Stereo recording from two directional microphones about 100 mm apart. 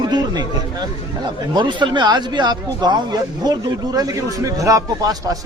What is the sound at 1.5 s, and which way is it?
Speech, 50° right (ahead or behind).